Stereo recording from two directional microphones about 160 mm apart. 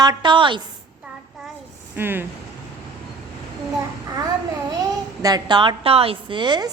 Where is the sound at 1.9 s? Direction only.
15° right (ahead or behind).